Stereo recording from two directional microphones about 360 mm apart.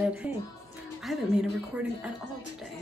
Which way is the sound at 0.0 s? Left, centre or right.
Centre.